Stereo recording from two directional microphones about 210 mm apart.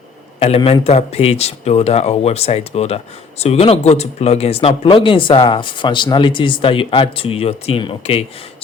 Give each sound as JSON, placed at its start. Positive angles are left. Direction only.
{"t": 0.3, "sound": "speech", "side_deg": 25}